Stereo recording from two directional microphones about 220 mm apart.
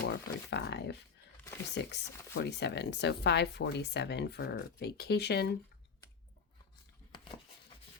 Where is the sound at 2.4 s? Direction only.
50° left (ahead or behind).